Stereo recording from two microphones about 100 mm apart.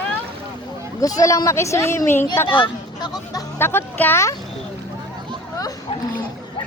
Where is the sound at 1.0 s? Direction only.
35° left (ahead or behind).